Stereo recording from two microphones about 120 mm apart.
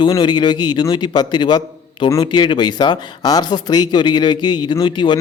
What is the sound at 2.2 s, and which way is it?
Speech, 40° left (ahead or behind).